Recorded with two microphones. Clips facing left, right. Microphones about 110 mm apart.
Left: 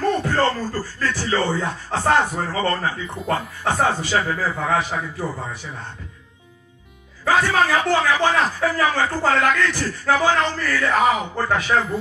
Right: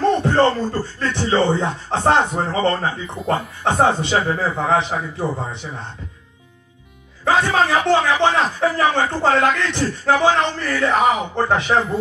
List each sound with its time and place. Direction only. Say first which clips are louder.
0.0 s speech: right 4 dB; 25° right (ahead or behind)
7.2 s speech: right 1 dB; 25° right (ahead or behind)